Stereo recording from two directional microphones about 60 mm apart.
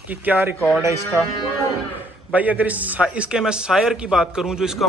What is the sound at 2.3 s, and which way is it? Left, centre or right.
A man's voice, right.